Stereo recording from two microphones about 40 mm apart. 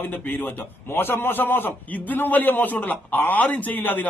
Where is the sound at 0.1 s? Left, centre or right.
Left.